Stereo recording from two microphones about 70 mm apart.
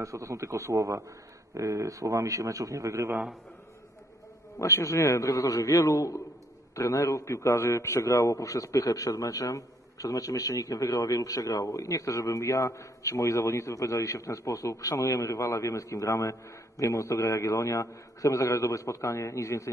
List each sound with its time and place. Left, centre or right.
0.0 s a man's voice: right
4.6 s a man's voice: left